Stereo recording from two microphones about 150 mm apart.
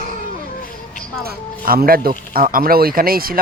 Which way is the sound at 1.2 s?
85° right.